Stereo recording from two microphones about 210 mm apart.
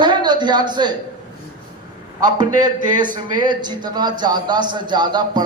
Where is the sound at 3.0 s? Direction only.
40° right (ahead or behind).